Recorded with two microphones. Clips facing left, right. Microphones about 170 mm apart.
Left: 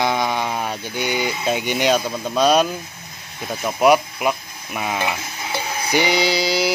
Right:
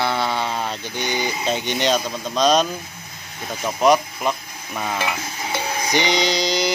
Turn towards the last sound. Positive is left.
turn(degrees=5)  # may be behind; listen again after turning